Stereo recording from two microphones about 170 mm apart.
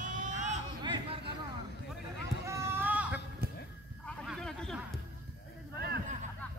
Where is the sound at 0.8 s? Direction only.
30° right (ahead or behind).